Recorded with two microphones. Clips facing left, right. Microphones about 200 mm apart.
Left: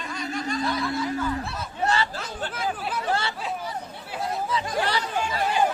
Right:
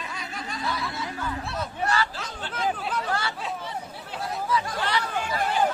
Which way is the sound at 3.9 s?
Centre (ahead or behind).